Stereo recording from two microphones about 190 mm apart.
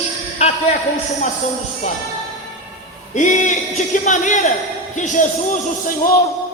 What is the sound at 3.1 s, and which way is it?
Speech, 40° left (ahead or behind).